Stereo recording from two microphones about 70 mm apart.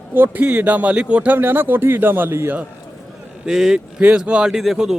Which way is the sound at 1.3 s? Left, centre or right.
Right.